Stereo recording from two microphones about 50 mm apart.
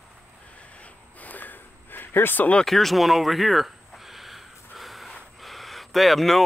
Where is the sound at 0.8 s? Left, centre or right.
Left.